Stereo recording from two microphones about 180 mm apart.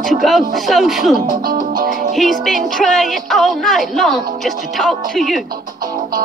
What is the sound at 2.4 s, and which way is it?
Speech, centre (ahead or behind).